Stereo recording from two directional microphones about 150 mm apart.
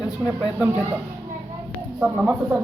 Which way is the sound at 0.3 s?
15° right (ahead or behind).